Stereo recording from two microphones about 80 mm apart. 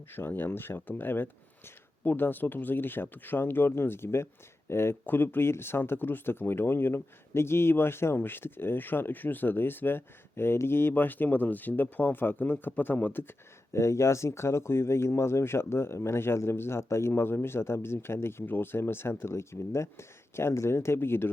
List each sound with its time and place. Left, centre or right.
0.1 s speech: left
13.7 s speech: left